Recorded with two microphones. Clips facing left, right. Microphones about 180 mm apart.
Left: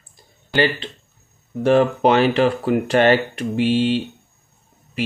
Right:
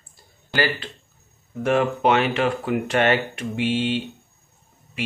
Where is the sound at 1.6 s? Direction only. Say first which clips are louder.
Left 4 dB; 35° left (ahead or behind).